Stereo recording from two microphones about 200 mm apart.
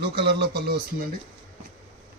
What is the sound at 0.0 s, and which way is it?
Speech, 55° right (ahead or behind).